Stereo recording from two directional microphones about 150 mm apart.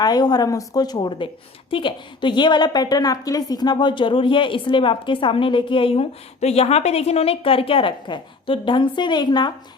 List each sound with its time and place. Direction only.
0.0 s a woman's voice: 25° left (ahead or behind)